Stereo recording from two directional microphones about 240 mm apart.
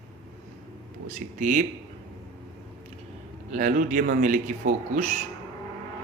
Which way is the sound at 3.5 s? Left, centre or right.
Right.